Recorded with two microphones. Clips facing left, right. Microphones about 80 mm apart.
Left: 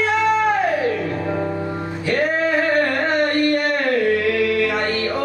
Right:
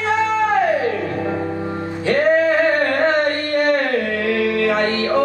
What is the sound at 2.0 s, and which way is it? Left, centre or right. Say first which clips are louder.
Music: right 5 dB; right.